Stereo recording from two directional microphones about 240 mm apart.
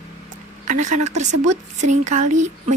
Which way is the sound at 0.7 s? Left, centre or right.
Right.